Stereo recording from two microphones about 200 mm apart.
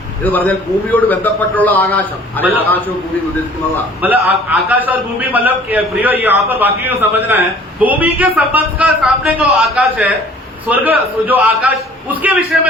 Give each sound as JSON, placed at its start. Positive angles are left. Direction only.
{"t": 0.3, "sound": "a man's voice", "side_deg": 10}
{"t": 4.0, "sound": "a man's voice", "side_deg": -10}